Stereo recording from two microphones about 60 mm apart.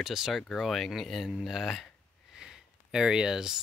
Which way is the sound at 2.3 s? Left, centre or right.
Centre.